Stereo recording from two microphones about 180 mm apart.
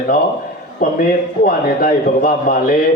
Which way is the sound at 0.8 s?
50° left (ahead or behind).